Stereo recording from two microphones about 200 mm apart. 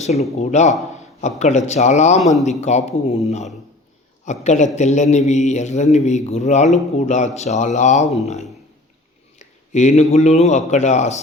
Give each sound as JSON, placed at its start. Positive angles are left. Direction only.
{"t": 0.0, "sound": "a man's voice", "side_deg": 35}